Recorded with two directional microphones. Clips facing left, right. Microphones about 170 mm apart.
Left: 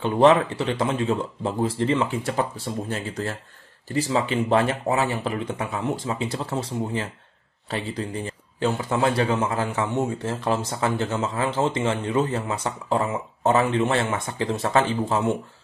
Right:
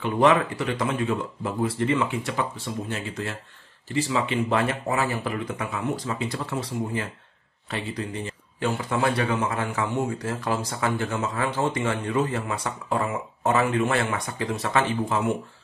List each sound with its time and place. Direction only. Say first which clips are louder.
0.0 s a man's voice: left 3 dB; 30° left (ahead or behind)